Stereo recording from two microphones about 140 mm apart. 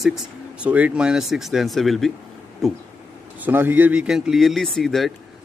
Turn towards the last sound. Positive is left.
turn(degrees=0)  # may be behind; listen again after turning